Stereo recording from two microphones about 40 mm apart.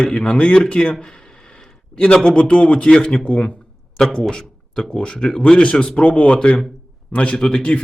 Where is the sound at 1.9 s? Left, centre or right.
Left.